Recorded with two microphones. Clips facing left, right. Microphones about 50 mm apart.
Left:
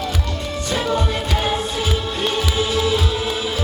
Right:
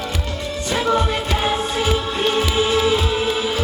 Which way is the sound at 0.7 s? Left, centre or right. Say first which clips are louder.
Right 3 dB; right.